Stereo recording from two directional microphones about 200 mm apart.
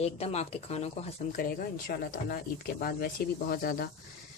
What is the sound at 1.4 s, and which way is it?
Speech, 45° left (ahead or behind).